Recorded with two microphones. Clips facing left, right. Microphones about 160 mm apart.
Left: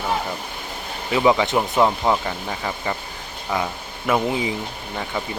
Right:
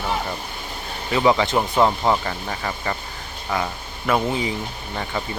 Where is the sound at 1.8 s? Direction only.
5° left (ahead or behind).